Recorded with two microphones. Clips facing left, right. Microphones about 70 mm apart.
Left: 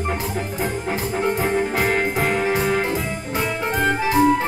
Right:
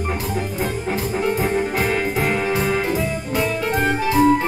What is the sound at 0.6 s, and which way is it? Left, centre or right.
Music, left.